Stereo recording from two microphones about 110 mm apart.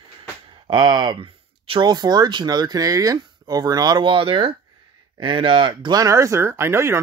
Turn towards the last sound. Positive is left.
turn(degrees=-25)  # may be behind; listen again after turning